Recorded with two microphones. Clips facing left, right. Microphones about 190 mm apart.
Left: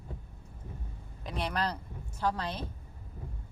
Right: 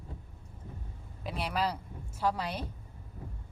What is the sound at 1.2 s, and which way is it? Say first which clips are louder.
A woman's voice: right 1 dB; 5° right (ahead or behind).